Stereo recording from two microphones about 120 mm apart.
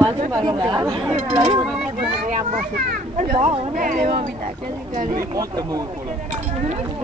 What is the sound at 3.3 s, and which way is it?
Speech, 50° right (ahead or behind).